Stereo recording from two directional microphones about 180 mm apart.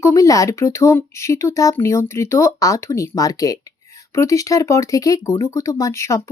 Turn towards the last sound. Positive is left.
turn(degrees=15)  # may be behind; listen again after turning